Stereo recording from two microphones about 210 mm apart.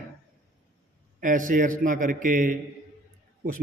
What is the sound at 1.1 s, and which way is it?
A man's voice, 40° right (ahead or behind).